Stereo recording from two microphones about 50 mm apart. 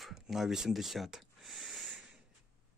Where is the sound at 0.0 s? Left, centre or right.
Centre.